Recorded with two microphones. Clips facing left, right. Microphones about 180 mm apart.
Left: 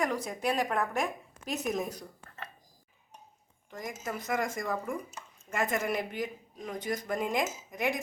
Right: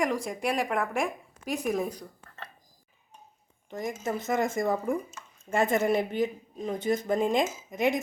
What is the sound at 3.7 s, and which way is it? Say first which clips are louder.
Speech: right 6 dB; 25° right (ahead or behind).